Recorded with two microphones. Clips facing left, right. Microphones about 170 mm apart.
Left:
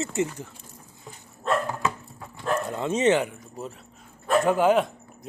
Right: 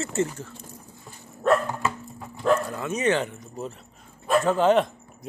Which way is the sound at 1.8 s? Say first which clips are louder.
Even; centre (ahead or behind).